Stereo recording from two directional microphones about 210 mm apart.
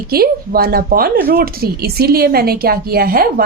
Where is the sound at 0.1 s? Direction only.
45° right (ahead or behind).